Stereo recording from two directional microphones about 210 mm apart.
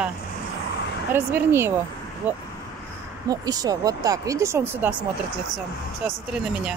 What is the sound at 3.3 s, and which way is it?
Speech, 15° right (ahead or behind).